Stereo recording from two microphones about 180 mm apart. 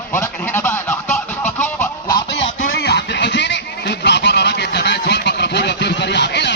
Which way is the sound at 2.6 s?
65° left (ahead or behind).